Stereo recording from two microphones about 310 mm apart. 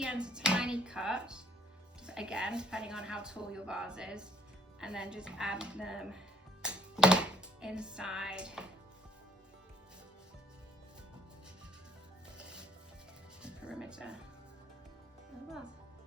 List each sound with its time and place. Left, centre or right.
0.0 s speech: centre
12.4 s music: centre